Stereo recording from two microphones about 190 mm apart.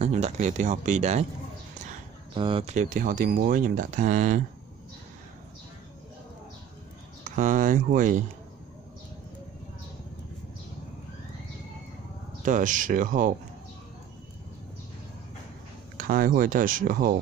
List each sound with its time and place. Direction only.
0.0 s speech: 35° right (ahead or behind)
2.3 s speech: 25° right (ahead or behind)
2.7 s speech: 40° right (ahead or behind)
7.2 s speech: 45° right (ahead or behind)
12.4 s speech: 45° right (ahead or behind)
16.0 s speech: 45° right (ahead or behind)